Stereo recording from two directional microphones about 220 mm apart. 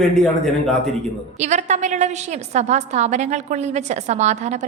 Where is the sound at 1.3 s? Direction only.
30° right (ahead or behind).